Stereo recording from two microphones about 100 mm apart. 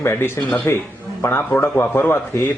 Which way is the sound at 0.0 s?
25° left (ahead or behind).